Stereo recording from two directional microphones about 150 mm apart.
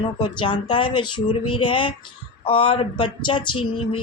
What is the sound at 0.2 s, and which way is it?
Speech, 30° left (ahead or behind).